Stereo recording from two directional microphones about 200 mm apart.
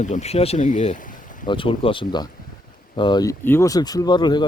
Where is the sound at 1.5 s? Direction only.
25° left (ahead or behind).